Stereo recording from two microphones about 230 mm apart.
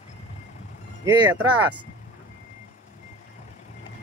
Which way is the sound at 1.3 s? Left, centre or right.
Centre.